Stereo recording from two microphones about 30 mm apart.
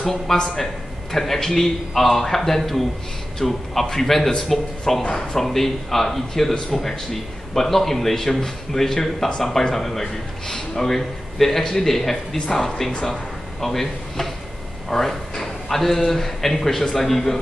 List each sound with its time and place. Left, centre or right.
0.3 s speech: centre